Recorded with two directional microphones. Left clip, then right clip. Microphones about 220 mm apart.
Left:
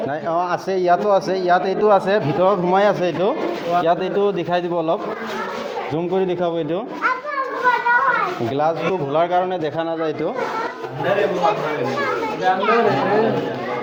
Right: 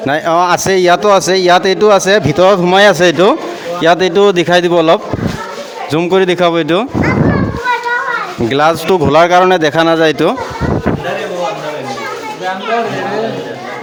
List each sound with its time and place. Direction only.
0.1 s speech: 45° right (ahead or behind)
8.5 s speech: 45° right (ahead or behind)